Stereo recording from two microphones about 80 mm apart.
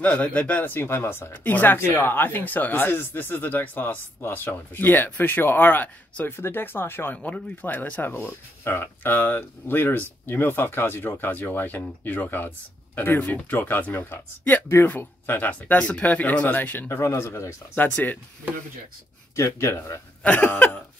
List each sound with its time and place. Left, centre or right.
0.0 s speech: centre
17.0 s speech: left
17.7 s speech: left
19.3 s speech: left
20.2 s speech: left